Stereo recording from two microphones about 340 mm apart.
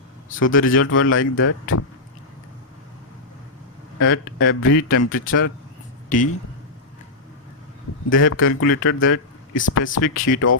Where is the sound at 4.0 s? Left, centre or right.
Left.